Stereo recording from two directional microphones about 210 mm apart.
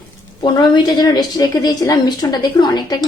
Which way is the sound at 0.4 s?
20° left (ahead or behind).